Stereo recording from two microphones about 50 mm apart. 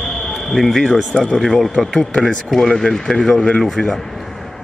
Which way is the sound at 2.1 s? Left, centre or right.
Centre.